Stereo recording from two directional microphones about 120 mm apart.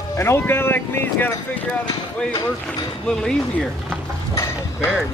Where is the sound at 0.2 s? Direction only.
20° left (ahead or behind).